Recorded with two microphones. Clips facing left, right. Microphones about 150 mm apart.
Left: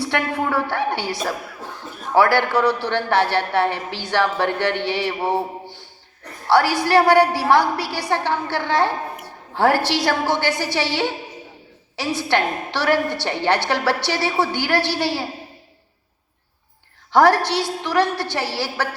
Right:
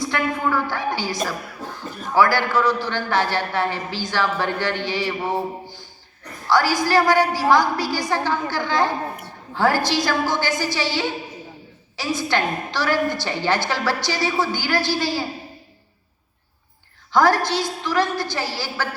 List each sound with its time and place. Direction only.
0.0 s a man's voice: 70° left (ahead or behind)
5.6 s a sound: 65° left (ahead or behind)
6.5 s a man's voice: 65° left (ahead or behind)
17.1 s a woman's voice: 70° left (ahead or behind)